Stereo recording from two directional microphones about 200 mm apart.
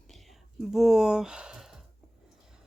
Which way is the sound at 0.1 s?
Centre (ahead or behind).